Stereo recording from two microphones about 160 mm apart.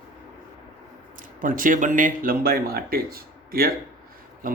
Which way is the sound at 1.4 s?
55° right (ahead or behind).